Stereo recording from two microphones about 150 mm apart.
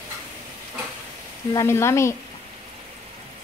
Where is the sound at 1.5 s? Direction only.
20° left (ahead or behind).